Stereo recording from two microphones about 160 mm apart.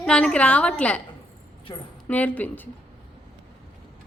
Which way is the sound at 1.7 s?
30° left (ahead or behind).